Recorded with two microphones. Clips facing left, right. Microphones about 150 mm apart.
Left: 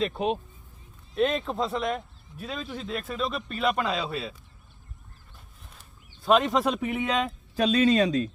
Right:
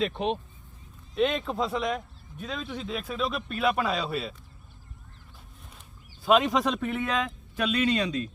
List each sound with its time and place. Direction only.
0.0 s speech: 5° left (ahead or behind)
6.2 s speech: centre (ahead or behind)
6.7 s speech: 15° left (ahead or behind); by 8.3 s 40° left (ahead or behind)